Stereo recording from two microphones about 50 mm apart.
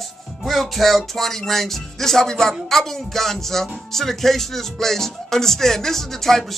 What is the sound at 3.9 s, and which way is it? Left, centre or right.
Music, centre.